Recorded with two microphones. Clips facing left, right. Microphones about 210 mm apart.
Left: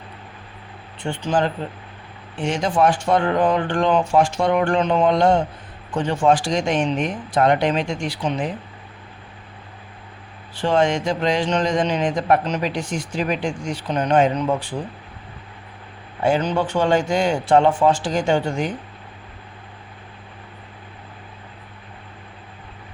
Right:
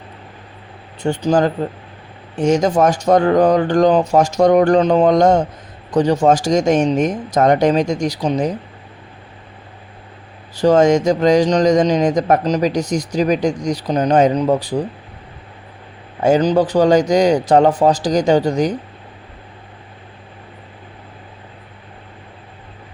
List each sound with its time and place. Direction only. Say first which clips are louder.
1.0 s speech: right 6 dB; 40° right (ahead or behind)
10.5 s speech: right 7 dB; 40° right (ahead or behind)
16.2 s speech: right 6 dB; 40° right (ahead or behind)